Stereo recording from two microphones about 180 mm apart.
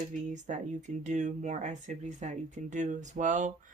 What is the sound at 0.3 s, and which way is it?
Speech, 40° right (ahead or behind).